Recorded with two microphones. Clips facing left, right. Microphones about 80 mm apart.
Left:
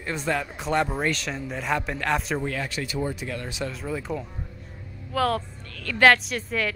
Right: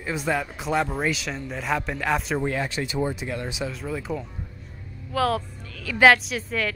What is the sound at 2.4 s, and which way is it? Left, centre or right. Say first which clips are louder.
Speech: right 3 dB; right.